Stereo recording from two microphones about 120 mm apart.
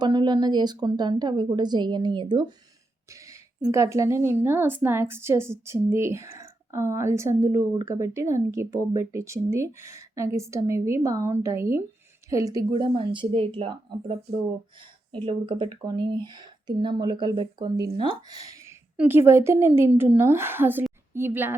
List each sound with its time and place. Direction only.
0.0 s speech: 35° right (ahead or behind)
3.1 s a sound: 25° right (ahead or behind)
3.6 s a woman's voice: 25° right (ahead or behind)
12.7 s speech: 45° right (ahead or behind)
18.5 s a sound: 20° right (ahead or behind)
18.9 s a woman's voice: 20° right (ahead or behind)